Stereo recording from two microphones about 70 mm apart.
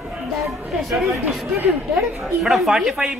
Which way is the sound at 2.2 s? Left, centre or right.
Centre.